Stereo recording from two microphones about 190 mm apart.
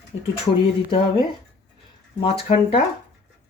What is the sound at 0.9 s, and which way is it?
Speech, 30° left (ahead or behind).